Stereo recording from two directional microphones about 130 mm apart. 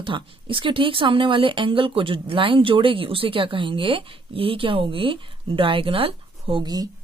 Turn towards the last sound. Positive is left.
turn(degrees=-30)  # may be behind; listen again after turning